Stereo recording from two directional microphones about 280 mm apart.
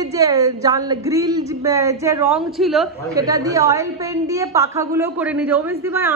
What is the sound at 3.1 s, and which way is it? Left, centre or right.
A woman's voice, centre.